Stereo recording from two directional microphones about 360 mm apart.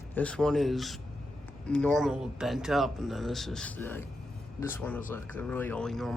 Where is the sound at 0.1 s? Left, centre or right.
Centre.